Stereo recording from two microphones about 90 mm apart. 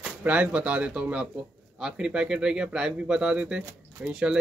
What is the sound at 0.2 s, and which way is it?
Speech, 15° right (ahead or behind).